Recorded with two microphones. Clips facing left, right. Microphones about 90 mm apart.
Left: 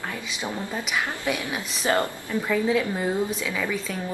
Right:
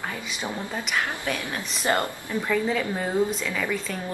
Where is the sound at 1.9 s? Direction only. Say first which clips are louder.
Left 2 dB; 15° right (ahead or behind).